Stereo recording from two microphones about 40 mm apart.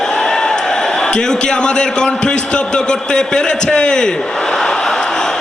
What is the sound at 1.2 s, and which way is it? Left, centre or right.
A man's voice, centre.